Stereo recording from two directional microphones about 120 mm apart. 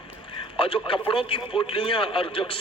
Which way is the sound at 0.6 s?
50° left (ahead or behind).